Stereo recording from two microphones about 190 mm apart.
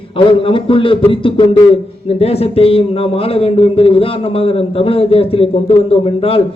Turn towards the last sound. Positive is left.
turn(degrees=30)  # may be behind; listen again after turning